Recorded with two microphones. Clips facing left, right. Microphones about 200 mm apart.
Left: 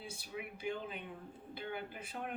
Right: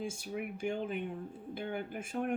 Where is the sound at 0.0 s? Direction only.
45° right (ahead or behind).